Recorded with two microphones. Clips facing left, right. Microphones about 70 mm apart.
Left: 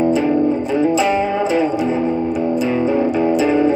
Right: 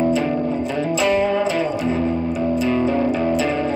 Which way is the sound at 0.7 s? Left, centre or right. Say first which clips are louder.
Left 2 dB; centre.